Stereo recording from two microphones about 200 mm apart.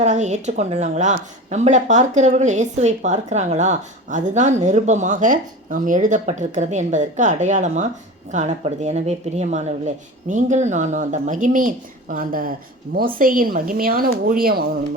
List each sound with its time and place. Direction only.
0.0 s a woman's voice: 35° right (ahead or behind)